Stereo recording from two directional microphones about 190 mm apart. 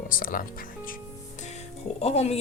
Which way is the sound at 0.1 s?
45° left (ahead or behind).